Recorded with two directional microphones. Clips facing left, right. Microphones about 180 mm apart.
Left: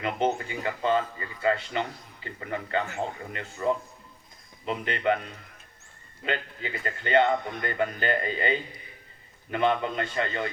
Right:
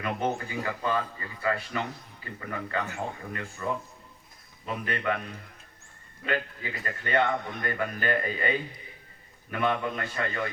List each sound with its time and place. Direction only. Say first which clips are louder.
0.0 s speech: left 3 dB; 25° left (ahead or behind)
6.2 s speech: right 1 dB; 25° left (ahead or behind)